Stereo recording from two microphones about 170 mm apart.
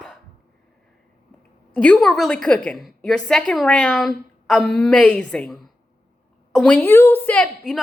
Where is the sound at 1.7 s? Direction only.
5° left (ahead or behind).